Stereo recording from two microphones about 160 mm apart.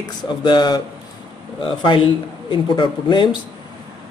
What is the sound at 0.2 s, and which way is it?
Speech, 30° left (ahead or behind).